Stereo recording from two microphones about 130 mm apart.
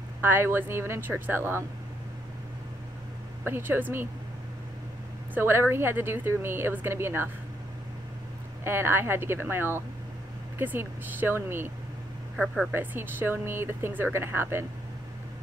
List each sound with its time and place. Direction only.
0.2 s speech: 15° right (ahead or behind)
3.4 s speech: 15° right (ahead or behind)
5.3 s speech: 20° right (ahead or behind)
8.6 s speech: 20° right (ahead or behind)
12.7 s speech: 15° right (ahead or behind)